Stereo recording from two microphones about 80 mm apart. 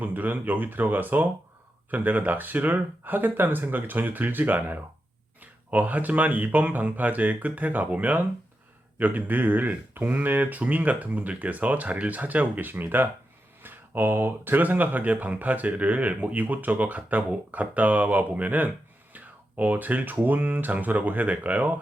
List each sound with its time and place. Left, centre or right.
0.0 s speech: right